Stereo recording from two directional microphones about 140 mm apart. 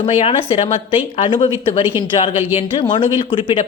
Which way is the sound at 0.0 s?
50° left (ahead or behind).